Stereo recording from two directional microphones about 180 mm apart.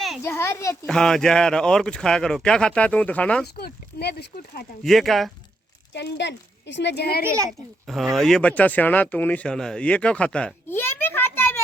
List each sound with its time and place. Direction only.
0.2 s speech: 15° left (ahead or behind)
0.9 s speech: 5° left (ahead or behind)
3.4 s speech: 60° left (ahead or behind)
4.8 s speech: centre (ahead or behind)
5.9 s speech: 70° left (ahead or behind)
8.1 s speech: centre (ahead or behind)